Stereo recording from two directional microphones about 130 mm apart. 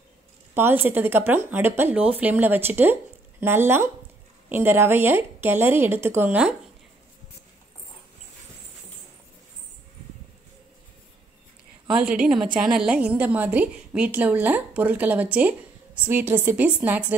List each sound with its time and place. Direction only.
0.6 s a woman's voice: 15° right (ahead or behind)
12.5 s a woman's voice: 5° right (ahead or behind)